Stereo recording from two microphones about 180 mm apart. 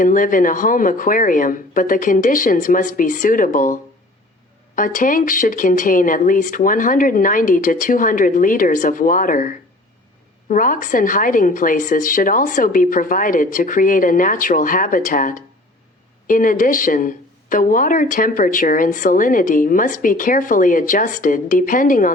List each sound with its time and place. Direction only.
0.0 s a woman's voice: 50° left (ahead or behind)